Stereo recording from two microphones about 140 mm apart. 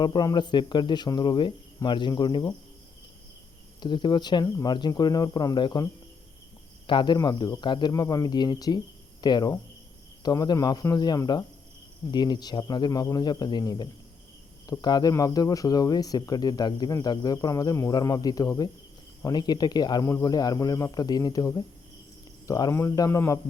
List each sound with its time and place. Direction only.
0.0 s speech: 30° left (ahead or behind)
3.8 s speech: 35° left (ahead or behind)
6.8 s speech: 35° left (ahead or behind)